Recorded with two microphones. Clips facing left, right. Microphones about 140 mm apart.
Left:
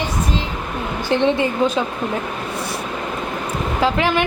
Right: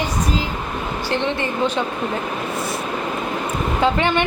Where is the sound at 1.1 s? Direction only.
15° left (ahead or behind).